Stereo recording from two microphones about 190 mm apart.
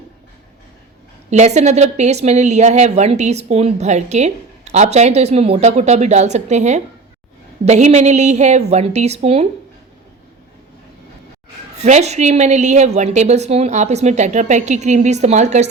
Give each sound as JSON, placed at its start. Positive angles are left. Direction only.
{"t": 1.3, "sound": "speech", "side_deg": -35}
{"t": 11.8, "sound": "speech", "side_deg": -35}